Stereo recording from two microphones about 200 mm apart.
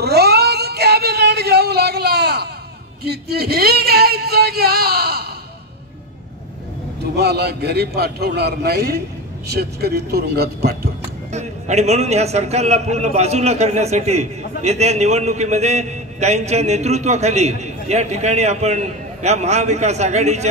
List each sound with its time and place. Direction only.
0.0 s cat: 55° right (ahead or behind)
3.0 s a sound: 55° right (ahead or behind)
7.2 s a man's voice: 55° right (ahead or behind)
11.3 s a man's voice: 35° right (ahead or behind)